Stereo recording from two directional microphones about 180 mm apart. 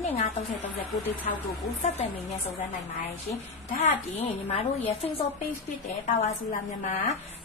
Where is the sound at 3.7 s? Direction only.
40° left (ahead or behind).